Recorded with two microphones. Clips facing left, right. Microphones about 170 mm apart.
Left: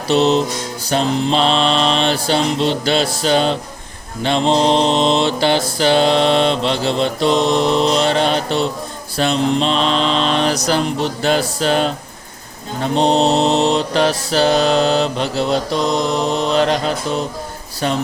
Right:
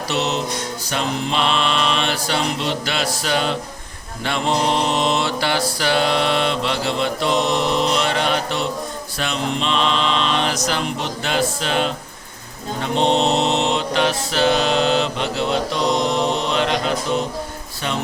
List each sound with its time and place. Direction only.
0.1 s mantra: 30° left (ahead or behind)